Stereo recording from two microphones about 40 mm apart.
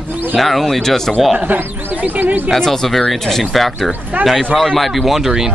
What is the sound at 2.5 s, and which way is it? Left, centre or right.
A man's voice, centre.